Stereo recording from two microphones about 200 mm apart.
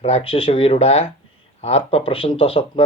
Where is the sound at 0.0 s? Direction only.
30° left (ahead or behind).